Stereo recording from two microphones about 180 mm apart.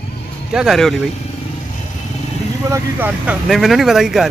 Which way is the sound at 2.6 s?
15° right (ahead or behind).